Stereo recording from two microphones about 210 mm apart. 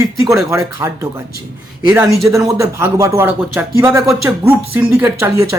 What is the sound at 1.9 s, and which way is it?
Speech, centre (ahead or behind).